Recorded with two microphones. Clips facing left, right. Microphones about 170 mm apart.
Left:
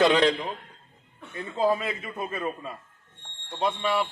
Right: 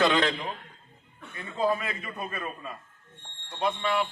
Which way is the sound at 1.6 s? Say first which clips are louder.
Left 2 dB; 20° left (ahead or behind).